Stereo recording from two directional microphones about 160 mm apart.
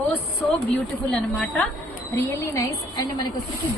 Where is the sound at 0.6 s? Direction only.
5° left (ahead or behind).